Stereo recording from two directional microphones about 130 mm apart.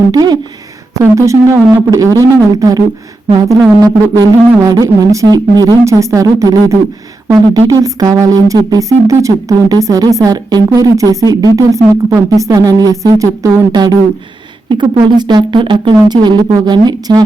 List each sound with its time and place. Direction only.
0.1 s speech: 30° right (ahead or behind)
15.0 s a woman's voice: 35° right (ahead or behind)